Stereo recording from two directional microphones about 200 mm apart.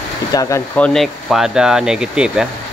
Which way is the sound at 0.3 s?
15° left (ahead or behind).